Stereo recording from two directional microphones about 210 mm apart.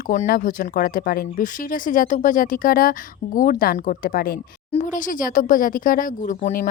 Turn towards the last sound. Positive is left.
turn(degrees=40)  # may be behind; listen again after turning